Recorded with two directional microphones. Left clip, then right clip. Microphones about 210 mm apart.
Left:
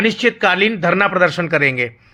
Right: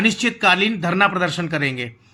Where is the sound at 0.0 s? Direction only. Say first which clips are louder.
Left 3 dB; 5° left (ahead or behind).